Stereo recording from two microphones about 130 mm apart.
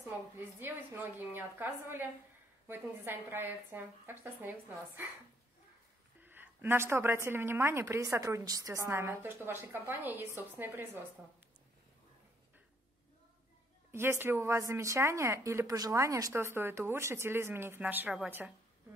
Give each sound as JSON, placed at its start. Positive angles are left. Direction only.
{"t": 0.1, "sound": "a woman's voice", "side_deg": -15}
{"t": 6.2, "sound": "a woman's voice", "side_deg": -15}
{"t": 13.9, "sound": "a woman's voice", "side_deg": -15}